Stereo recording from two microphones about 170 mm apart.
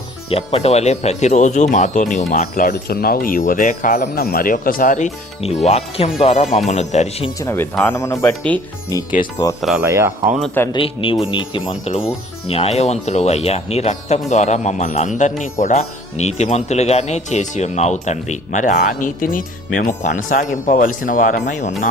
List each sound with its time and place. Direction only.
0.3 s speech: 35° left (ahead or behind)
7.3 s speech: 15° left (ahead or behind)
9.6 s speech: centre (ahead or behind)
9.8 s speech: 15° right (ahead or behind)
10.4 s speech: 10° left (ahead or behind)
10.7 s speech: 30° left (ahead or behind)